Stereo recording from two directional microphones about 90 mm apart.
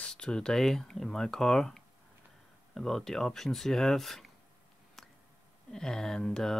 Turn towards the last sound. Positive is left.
turn(degrees=5)  # may be behind; listen again after turning